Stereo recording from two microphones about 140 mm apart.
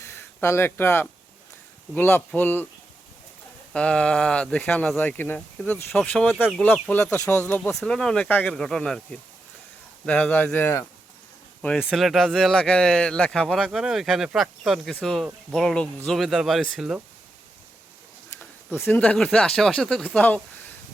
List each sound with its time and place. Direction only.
0.0 s a sound: 20° left (ahead or behind)
0.4 s speech: 15° left (ahead or behind)
3.7 s speech: 5° left (ahead or behind)
11.8 s speech: 5° right (ahead or behind)
18.9 s speech: 10° left (ahead or behind)